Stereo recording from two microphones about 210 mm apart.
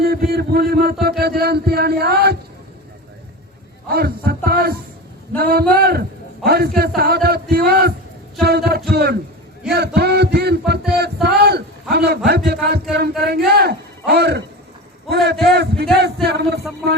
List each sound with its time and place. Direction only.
0.0 s a sound: 45° right (ahead or behind)
3.8 s a man's voice: 45° right (ahead or behind)
8.4 s music: 50° right (ahead or behind)
8.9 s a man's voice: 50° right (ahead or behind)
10.7 s a sound: 50° right (ahead or behind)
12.9 s a man's voice: 50° right (ahead or behind)